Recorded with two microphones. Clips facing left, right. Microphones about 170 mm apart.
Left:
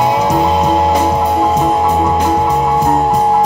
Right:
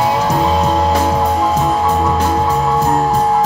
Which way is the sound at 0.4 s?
10° left (ahead or behind).